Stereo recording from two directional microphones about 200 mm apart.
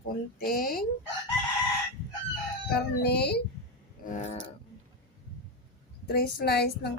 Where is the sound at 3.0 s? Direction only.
55° left (ahead or behind).